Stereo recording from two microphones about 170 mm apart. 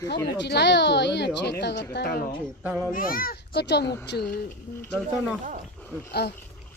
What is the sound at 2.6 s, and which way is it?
Speech, 10° right (ahead or behind).